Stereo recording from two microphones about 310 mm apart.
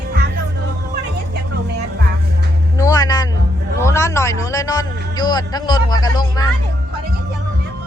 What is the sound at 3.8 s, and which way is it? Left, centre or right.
A man's voice, centre.